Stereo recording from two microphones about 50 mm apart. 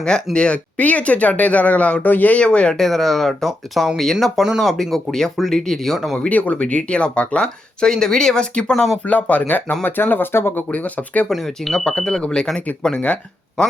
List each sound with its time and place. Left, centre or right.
0.3 s speech: left
2.4 s speech: left
2.7 s speech: centre
6.1 s speech: left
8.7 s speech: centre
9.0 s speech: left
10.7 s speech: left
11.3 s speech: centre